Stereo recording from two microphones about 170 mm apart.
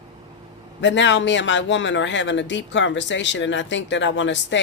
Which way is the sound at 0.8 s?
90° left.